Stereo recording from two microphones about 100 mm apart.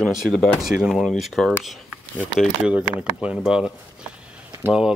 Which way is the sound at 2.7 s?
15° right (ahead or behind).